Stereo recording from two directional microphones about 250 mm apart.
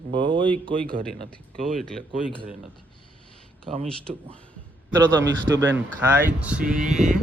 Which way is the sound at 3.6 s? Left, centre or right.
Right.